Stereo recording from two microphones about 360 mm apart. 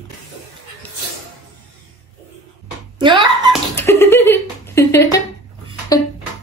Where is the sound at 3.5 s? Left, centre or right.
Centre.